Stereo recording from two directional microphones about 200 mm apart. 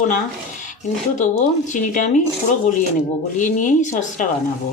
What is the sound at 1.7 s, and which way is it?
Speech, 40° left (ahead or behind).